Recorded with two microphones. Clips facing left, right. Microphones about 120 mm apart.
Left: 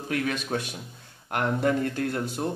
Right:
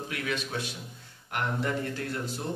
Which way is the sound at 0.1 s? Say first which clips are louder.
Left 7 dB; 45° left (ahead or behind).